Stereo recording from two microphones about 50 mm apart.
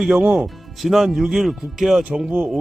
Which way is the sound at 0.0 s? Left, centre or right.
Centre.